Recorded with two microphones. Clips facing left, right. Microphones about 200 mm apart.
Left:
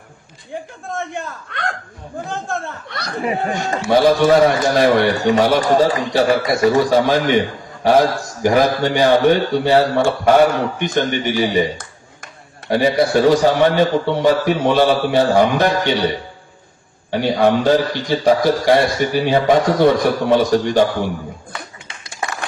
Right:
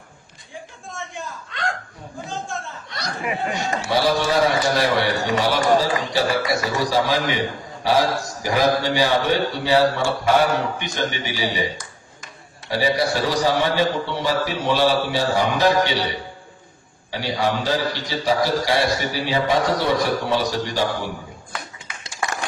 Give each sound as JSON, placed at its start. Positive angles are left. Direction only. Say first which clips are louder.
{"t": 0.5, "sound": "a man's voice", "louder": "left 9 dB", "side_deg": 60}